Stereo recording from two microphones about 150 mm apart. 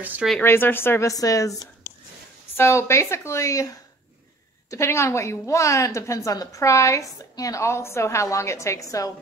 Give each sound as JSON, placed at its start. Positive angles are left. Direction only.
{"t": 0.0, "sound": "speech", "side_deg": -10}
{"t": 0.4, "sound": "speech", "side_deg": 15}
{"t": 2.5, "sound": "a woman's voice", "side_deg": 15}